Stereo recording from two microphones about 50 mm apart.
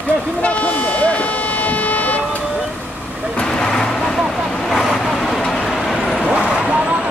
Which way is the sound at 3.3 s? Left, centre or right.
Centre.